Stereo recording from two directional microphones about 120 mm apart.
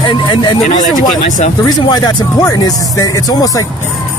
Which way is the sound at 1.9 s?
35° left (ahead or behind).